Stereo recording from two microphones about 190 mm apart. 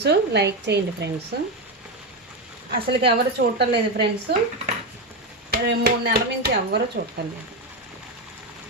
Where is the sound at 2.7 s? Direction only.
60° right (ahead or behind).